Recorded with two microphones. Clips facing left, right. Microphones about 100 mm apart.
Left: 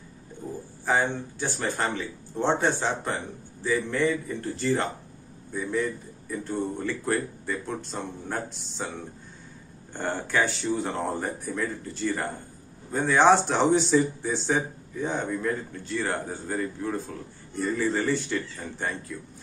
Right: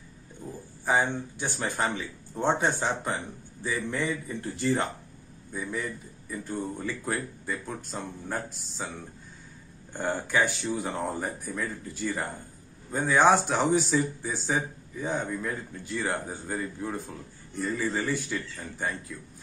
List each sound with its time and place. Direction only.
1.4 s speech: 15° right (ahead or behind)
5.5 s speech: 5° right (ahead or behind)
9.9 s speech: 10° right (ahead or behind)
17.6 s speech: centre (ahead or behind)